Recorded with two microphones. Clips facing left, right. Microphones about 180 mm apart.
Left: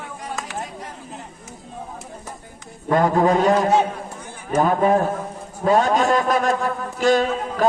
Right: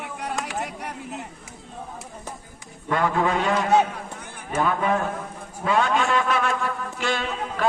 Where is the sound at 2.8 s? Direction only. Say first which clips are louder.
Left 6 dB; 40° left (ahead or behind).